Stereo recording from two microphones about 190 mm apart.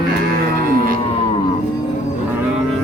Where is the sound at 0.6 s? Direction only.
50° right (ahead or behind).